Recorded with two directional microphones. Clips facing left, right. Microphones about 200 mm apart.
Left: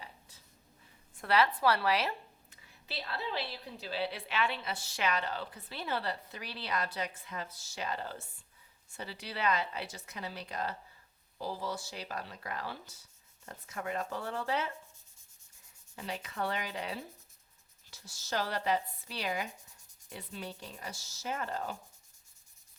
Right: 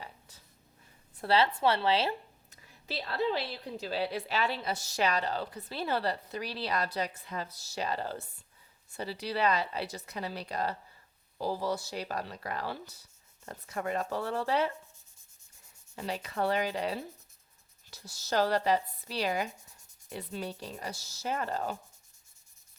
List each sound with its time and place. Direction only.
1.2 s speech: 30° right (ahead or behind)
2.5 s a woman's voice: 40° right (ahead or behind)
16.0 s a woman's voice: 35° right (ahead or behind)